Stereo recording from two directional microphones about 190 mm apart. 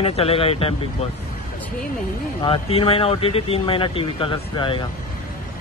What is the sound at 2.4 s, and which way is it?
Speech, 30° left (ahead or behind).